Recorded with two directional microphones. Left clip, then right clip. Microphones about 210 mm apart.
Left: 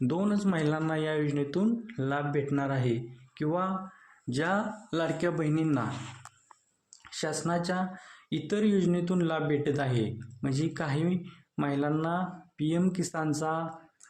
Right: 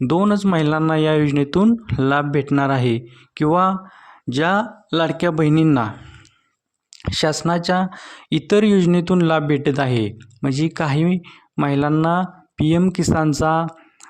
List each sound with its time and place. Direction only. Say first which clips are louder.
0.0 s speech: right 12 dB; 40° right (ahead or behind)
7.0 s speech: right 13 dB; 45° right (ahead or behind)